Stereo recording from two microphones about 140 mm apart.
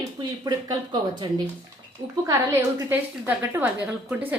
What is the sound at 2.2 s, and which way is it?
A woman's voice, 20° right (ahead or behind).